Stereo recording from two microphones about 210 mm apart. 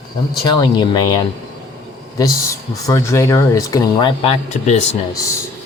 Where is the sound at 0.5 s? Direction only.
20° left (ahead or behind).